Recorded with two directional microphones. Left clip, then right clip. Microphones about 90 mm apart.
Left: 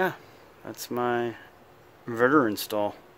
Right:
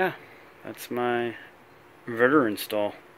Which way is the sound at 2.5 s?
25° left (ahead or behind).